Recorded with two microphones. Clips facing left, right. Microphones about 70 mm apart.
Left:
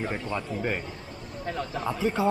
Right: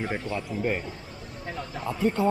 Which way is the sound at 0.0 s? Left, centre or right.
Centre.